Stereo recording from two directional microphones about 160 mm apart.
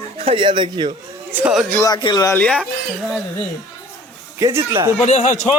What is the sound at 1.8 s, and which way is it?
Speech, 25° left (ahead or behind).